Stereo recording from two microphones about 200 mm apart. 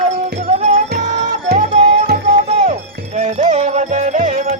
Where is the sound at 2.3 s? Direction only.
35° right (ahead or behind).